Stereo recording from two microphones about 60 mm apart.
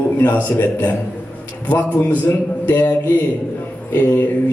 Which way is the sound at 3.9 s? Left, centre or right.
Left.